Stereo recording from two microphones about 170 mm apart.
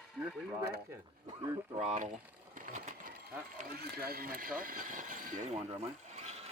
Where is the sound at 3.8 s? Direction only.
65° right (ahead or behind).